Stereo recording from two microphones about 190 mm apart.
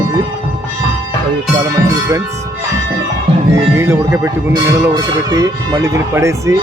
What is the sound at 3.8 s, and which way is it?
Speech, 15° right (ahead or behind).